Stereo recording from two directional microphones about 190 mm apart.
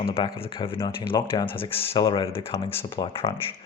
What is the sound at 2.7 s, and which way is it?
Speech, 10° left (ahead or behind).